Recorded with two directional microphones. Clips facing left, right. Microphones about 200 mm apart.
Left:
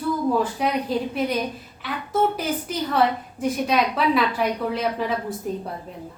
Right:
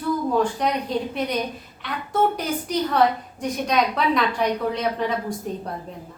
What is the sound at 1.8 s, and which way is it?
A woman's voice, 5° left (ahead or behind).